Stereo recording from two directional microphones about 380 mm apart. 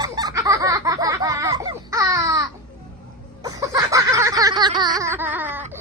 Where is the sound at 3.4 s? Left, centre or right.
Centre.